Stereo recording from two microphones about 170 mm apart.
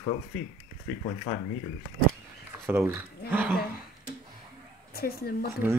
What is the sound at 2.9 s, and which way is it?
Speech, 10° right (ahead or behind).